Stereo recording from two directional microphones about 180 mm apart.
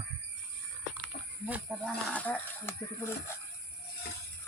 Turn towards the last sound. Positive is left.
turn(degrees=15)  # may be behind; listen again after turning